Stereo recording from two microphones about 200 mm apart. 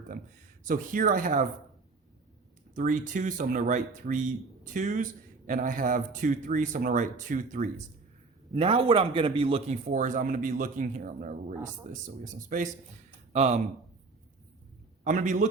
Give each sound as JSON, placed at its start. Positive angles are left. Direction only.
{"t": 0.6, "sound": "speech", "side_deg": -45}
{"t": 2.7, "sound": "a man's voice", "side_deg": -40}
{"t": 8.5, "sound": "a man's voice", "side_deg": -30}
{"t": 15.0, "sound": "a man's voice", "side_deg": -40}